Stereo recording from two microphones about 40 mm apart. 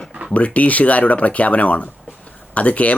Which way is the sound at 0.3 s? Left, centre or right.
Left.